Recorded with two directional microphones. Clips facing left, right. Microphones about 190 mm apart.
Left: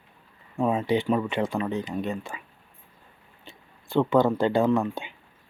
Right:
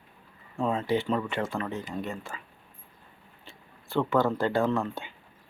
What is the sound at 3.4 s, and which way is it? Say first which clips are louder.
Speech: left 3 dB; 15° left (ahead or behind).